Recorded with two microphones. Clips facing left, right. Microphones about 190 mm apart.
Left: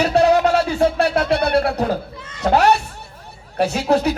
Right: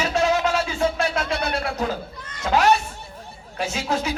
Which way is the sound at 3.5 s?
65° left (ahead or behind).